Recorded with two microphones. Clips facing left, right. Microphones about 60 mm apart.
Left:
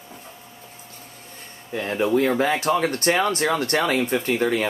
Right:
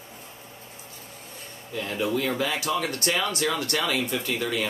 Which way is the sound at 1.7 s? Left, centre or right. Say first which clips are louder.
Left 6 dB; left.